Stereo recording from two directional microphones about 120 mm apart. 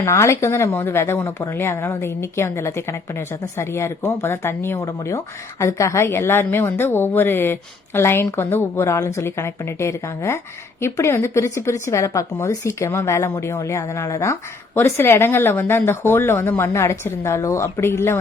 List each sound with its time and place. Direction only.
0.0 s a woman's voice: 25° left (ahead or behind)